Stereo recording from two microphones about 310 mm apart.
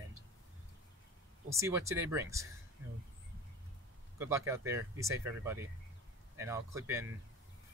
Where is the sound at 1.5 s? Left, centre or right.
Centre.